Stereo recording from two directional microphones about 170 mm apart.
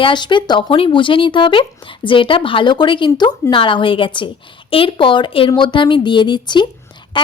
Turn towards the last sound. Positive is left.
turn(degrees=30)  # may be behind; listen again after turning